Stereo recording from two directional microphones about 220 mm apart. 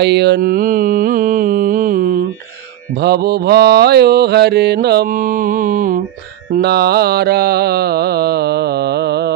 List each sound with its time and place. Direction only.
0.0 s mantra: 50° right (ahead or behind)